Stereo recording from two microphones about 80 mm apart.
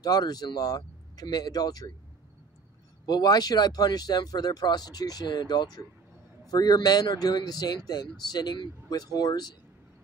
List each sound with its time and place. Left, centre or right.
0.0 s speech: left
3.1 s speech: left